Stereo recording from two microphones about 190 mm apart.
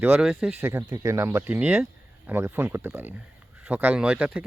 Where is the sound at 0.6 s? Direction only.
15° right (ahead or behind).